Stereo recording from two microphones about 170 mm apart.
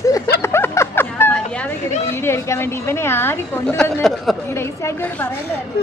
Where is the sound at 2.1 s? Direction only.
15° left (ahead or behind).